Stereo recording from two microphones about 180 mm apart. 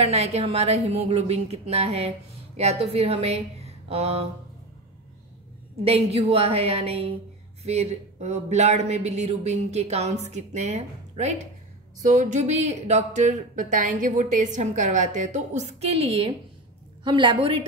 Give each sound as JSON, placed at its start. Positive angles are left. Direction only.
{"t": 0.0, "sound": "a woman's voice", "side_deg": -35}
{"t": 5.9, "sound": "a woman's voice", "side_deg": -35}